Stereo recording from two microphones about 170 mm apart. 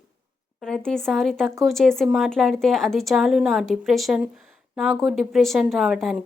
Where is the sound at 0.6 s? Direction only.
5° left (ahead or behind).